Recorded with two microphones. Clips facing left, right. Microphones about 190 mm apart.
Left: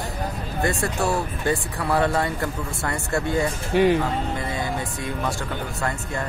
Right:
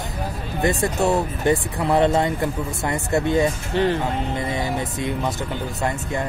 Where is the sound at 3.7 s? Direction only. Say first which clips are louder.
Left 6 dB; 15° left (ahead or behind).